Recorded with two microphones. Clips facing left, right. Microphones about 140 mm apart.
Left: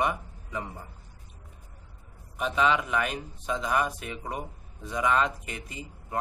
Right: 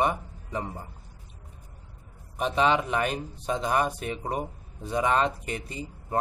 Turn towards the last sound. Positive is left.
turn(degrees=-35)  # may be behind; listen again after turning